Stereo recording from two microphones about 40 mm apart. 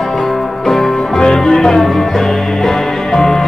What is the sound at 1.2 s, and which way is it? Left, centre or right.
Music, centre.